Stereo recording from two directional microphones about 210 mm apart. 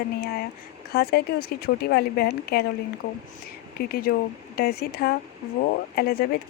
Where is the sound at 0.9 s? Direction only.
45° left (ahead or behind).